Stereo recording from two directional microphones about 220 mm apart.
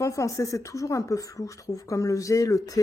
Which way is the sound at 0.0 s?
15° left (ahead or behind).